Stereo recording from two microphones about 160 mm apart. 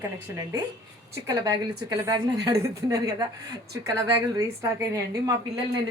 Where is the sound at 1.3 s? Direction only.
25° right (ahead or behind).